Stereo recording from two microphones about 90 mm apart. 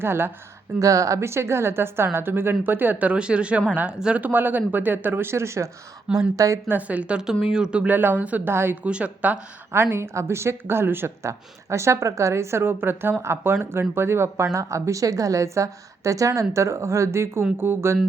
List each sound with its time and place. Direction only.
0.0 s speech: 25° right (ahead or behind)
0.8 s speech: 40° right (ahead or behind)
6.7 s speech: 15° right (ahead or behind)
8.8 s speech: 10° right (ahead or behind)
9.7 s speech: 25° right (ahead or behind)